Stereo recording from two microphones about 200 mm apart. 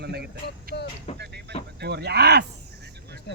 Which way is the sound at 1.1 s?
55° right (ahead or behind).